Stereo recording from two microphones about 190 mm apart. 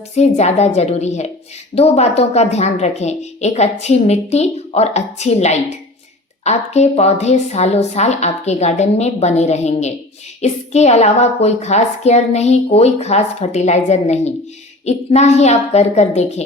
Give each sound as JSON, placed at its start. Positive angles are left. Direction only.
{"t": 0.2, "sound": "a woman's voice", "side_deg": 35}